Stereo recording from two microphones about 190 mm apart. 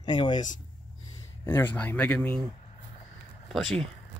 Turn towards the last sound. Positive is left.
turn(degrees=0)  # may be behind; listen again after turning